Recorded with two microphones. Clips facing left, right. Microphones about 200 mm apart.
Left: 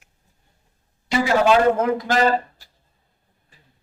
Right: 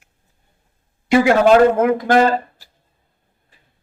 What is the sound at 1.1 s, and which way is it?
A man's voice, 50° right (ahead or behind).